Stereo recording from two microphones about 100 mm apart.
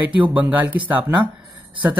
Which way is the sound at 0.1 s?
15° right (ahead or behind).